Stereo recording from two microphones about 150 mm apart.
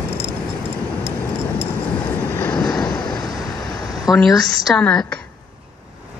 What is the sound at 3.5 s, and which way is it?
A woman's voice, centre (ahead or behind).